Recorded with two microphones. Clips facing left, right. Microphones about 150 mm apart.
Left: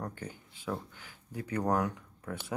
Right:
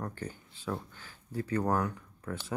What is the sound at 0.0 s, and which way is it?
Speech, 15° left (ahead or behind).